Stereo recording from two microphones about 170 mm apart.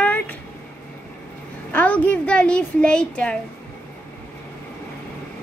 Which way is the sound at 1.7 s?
10° left (ahead or behind).